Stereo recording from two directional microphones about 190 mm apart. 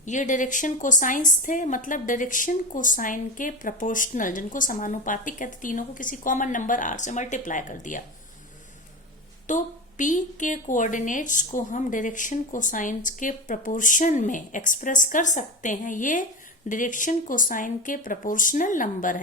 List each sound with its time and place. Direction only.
0.0 s a woman's voice: 40° left (ahead or behind)
9.5 s a woman's voice: 40° left (ahead or behind)